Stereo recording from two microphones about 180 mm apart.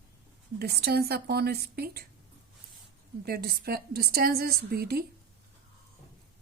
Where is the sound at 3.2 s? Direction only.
60° right (ahead or behind).